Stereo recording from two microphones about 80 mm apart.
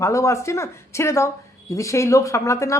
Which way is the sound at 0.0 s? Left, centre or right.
Left.